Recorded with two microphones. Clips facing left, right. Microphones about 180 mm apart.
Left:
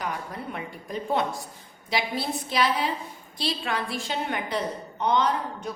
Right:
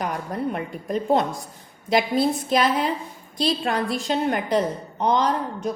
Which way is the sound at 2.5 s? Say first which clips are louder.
Even; 45° right (ahead or behind).